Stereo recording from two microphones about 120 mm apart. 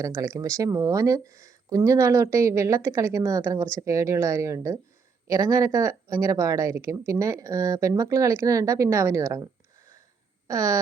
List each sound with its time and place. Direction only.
0.0 s speech: 30° right (ahead or behind)